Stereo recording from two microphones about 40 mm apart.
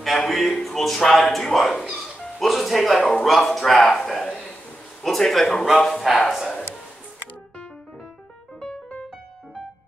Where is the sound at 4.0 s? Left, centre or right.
Centre.